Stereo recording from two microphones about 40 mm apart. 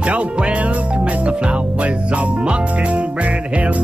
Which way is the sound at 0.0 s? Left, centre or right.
Right.